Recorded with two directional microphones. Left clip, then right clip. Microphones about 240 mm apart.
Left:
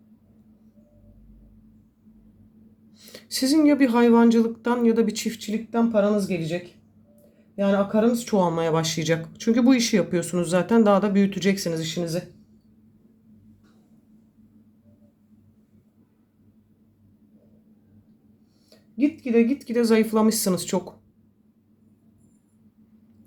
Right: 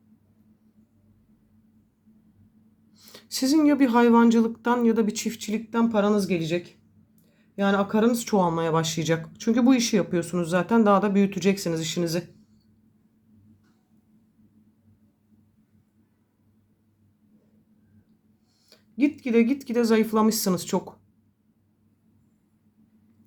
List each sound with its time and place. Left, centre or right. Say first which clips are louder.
2.9 s speech: left 3 dB; centre
8.4 s speech: left 1 dB; centre
18.7 s speech: even; centre